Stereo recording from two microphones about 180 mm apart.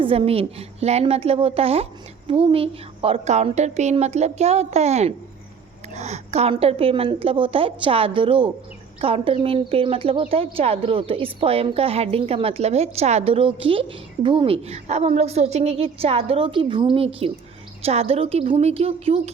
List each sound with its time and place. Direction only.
0.0 s a woman's voice: 30° right (ahead or behind)